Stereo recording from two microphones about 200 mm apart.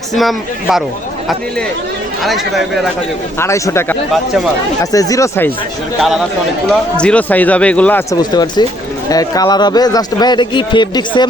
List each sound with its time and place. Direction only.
0.1 s a man's voice: centre (ahead or behind)
2.2 s a man's voice: centre (ahead or behind)
3.3 s a man's voice: 15° left (ahead or behind)
6.0 s a man's voice: centre (ahead or behind)
8.2 s a man's voice: 20° left (ahead or behind)